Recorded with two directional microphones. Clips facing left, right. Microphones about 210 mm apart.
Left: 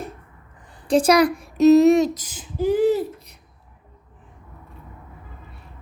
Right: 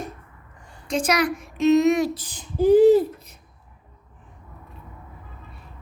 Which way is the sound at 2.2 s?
5° left (ahead or behind).